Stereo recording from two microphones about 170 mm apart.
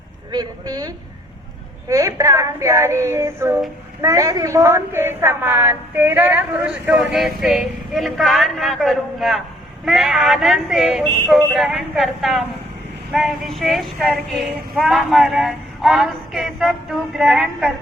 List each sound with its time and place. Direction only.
0.3 s a woman's voice: 25° right (ahead or behind); by 17.7 s centre (ahead or behind)